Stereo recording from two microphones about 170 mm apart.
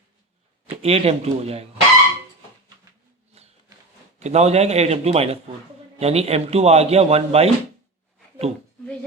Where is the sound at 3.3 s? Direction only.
35° right (ahead or behind).